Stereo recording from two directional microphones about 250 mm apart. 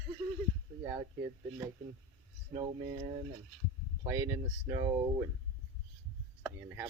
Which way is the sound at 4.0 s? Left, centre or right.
Centre.